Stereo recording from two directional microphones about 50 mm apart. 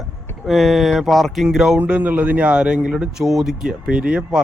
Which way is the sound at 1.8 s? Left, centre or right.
Right.